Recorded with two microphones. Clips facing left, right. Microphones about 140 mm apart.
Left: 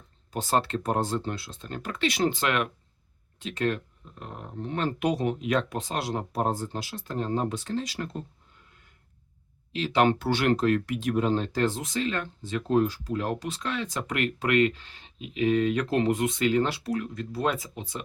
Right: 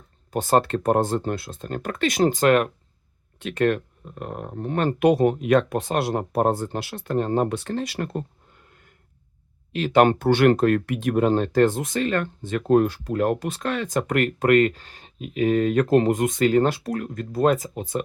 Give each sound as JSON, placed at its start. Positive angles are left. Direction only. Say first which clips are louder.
{"t": 0.3, "sound": "speech", "louder": "right 6 dB", "side_deg": -50}
{"t": 3.3, "sound": "speech", "louder": "right 7 dB", "side_deg": -60}
{"t": 9.7, "sound": "speech", "louder": "right 6 dB", "side_deg": -55}